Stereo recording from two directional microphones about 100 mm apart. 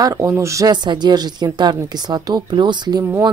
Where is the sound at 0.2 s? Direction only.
25° right (ahead or behind).